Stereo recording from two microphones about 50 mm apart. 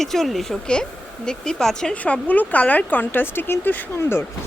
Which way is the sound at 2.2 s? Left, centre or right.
Left.